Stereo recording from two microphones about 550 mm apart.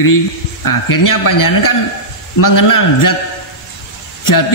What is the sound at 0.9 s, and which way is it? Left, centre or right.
A man's voice, left.